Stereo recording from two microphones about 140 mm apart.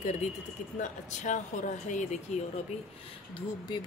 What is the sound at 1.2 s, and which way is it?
Speech, 60° left (ahead or behind).